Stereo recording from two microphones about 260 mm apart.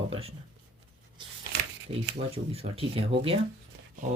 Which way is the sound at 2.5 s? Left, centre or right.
Right.